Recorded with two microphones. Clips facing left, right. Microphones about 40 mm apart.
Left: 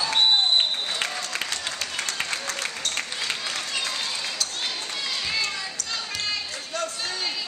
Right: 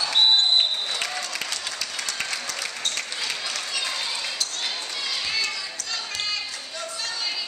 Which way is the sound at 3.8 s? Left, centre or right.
Centre.